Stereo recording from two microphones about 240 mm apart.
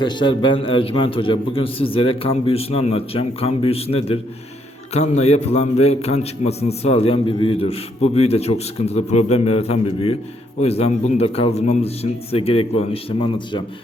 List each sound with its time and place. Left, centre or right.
0.0 s a man's voice: centre